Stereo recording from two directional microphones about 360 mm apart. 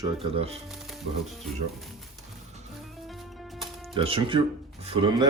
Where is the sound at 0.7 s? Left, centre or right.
Centre.